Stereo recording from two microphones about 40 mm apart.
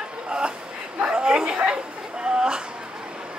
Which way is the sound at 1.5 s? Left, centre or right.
Right.